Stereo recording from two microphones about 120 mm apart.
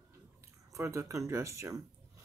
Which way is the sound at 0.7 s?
25° right (ahead or behind).